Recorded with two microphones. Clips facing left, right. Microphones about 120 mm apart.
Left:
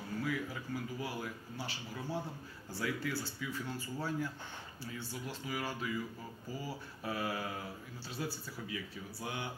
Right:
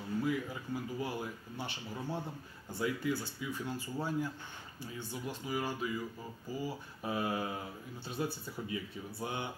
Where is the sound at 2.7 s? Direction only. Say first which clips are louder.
Right 3 dB; 20° right (ahead or behind).